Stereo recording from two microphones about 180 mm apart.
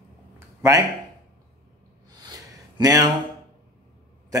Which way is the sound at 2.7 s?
20° right (ahead or behind).